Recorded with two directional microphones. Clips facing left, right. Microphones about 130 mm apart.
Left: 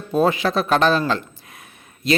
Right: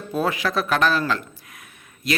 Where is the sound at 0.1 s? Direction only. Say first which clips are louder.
Left 5 dB; 25° left (ahead or behind).